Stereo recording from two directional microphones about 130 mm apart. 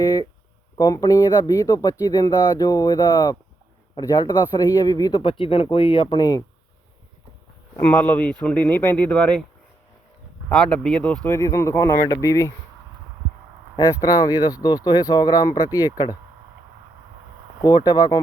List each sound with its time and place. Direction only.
0.8 s speech: 25° left (ahead or behind)
5.2 s speech: 40° left (ahead or behind)
7.9 s speech: 15° left (ahead or behind)
10.8 s speech: 5° left (ahead or behind)
11.3 s speech: 25° left (ahead or behind)
14.0 s speech: 30° left (ahead or behind)
17.6 s speech: 30° left (ahead or behind)